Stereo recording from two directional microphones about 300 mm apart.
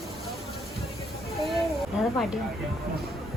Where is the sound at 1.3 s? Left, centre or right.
Centre.